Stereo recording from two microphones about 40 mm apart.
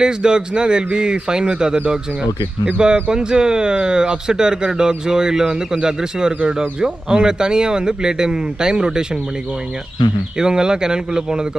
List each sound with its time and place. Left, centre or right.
0.0 s speech: right
2.8 s speech: centre
10.4 s speech: centre